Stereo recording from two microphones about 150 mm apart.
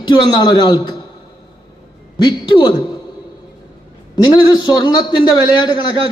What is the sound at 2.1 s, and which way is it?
Speech, 30° left (ahead or behind).